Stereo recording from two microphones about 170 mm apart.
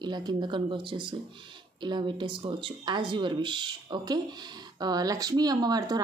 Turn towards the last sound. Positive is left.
turn(degrees=-25)  # may be behind; listen again after turning